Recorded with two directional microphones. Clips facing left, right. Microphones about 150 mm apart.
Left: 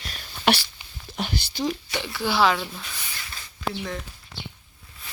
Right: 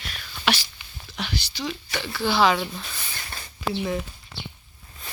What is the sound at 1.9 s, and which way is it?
Speech, 20° left (ahead or behind).